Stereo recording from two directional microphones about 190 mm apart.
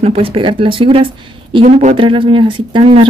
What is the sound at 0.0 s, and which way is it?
Speech, 30° right (ahead or behind).